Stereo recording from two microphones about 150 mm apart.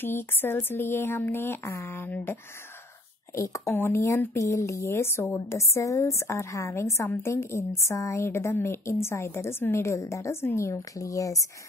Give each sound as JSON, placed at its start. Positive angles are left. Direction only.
{"t": 0.0, "sound": "speech", "side_deg": 15}
{"t": 3.3, "sound": "speech", "side_deg": 20}